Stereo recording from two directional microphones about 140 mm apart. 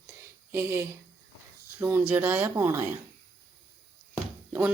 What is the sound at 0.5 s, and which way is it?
Speech, 15° right (ahead or behind).